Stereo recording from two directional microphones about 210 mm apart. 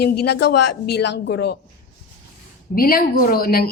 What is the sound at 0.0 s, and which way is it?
A woman's voice, 50° left (ahead or behind).